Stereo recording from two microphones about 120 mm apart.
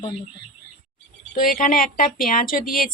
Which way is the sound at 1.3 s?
90° left.